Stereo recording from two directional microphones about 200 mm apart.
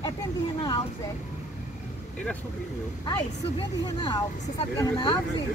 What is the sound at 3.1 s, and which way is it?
Speech, 20° left (ahead or behind).